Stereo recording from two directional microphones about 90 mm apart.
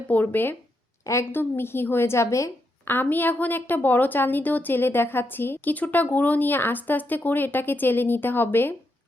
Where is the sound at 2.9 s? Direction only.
20° left (ahead or behind).